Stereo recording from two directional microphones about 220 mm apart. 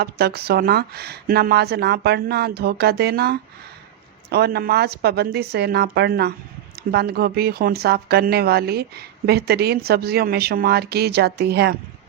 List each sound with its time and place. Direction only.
0.0 s speech: 45° right (ahead or behind)